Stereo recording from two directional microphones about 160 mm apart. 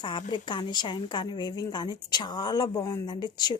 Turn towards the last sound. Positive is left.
turn(degrees=25)  # may be behind; listen again after turning